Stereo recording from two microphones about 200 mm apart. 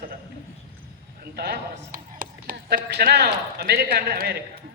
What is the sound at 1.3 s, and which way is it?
A man's voice, 50° right (ahead or behind).